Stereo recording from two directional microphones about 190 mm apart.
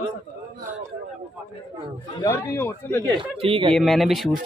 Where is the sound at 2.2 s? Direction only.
15° left (ahead or behind).